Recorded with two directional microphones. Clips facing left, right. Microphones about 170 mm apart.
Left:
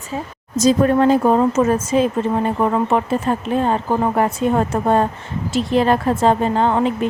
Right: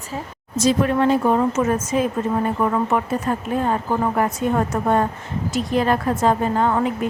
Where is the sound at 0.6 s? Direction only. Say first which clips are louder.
Left 4 dB; 40° left (ahead or behind).